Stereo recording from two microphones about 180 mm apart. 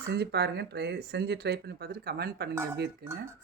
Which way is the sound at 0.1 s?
65° right (ahead or behind).